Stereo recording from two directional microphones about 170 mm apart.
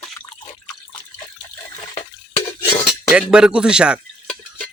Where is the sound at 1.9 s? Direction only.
40° left (ahead or behind).